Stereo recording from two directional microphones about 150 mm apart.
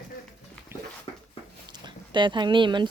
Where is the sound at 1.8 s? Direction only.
30° right (ahead or behind).